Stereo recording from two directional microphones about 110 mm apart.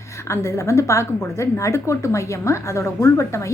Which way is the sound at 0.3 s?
25° left (ahead or behind).